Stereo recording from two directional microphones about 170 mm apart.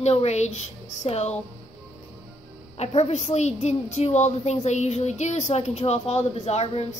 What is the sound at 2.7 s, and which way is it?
A woman's voice, 40° left (ahead or behind).